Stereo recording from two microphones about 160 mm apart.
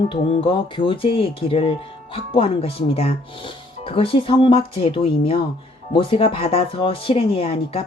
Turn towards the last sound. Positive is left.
turn(degrees=35)  # may be behind; listen again after turning